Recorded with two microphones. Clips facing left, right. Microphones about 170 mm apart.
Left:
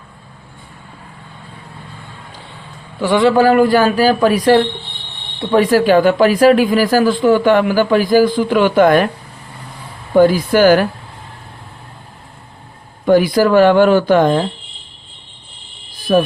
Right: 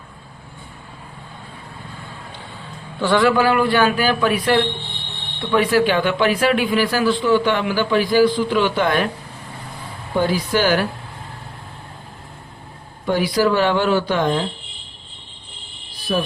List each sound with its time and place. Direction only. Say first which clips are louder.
3.0 s speech: left 3 dB; 15° left (ahead or behind)
3.3 s a man's voice: left 6 dB; 40° left (ahead or behind)
10.2 s speech: left 9 dB; 50° left (ahead or behind)
13.1 s speech: left 6 dB; 50° left (ahead or behind)
16.1 s speech: left 8 dB; 60° left (ahead or behind)